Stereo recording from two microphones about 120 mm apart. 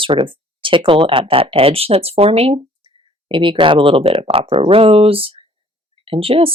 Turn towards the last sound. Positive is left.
turn(degrees=-50)  # may be behind; listen again after turning